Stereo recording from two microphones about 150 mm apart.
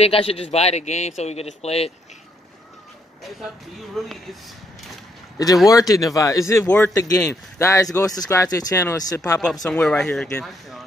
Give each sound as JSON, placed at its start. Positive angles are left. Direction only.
{"t": 0.0, "sound": "speech", "side_deg": 40}
{"t": 3.9, "sound": "speech", "side_deg": 0}
{"t": 5.7, "sound": "speech", "side_deg": 20}
{"t": 9.7, "sound": "speech", "side_deg": 5}